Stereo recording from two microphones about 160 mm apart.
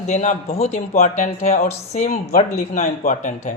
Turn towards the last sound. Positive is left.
turn(degrees=50)  # may be behind; listen again after turning